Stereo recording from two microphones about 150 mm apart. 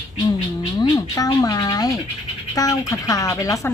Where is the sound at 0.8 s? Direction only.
25° left (ahead or behind).